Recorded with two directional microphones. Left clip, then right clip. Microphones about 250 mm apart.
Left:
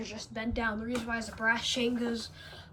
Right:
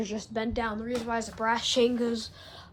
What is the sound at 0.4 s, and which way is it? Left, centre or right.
Speech, centre.